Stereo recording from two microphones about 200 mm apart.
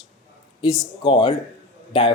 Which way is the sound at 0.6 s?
25° left (ahead or behind).